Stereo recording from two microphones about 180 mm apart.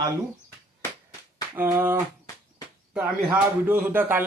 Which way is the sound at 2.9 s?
10° right (ahead or behind).